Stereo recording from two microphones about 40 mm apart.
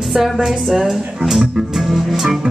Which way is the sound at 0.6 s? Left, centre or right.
Centre.